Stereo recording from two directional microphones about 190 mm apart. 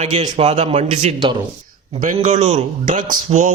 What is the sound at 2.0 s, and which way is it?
A man's voice, 45° right (ahead or behind).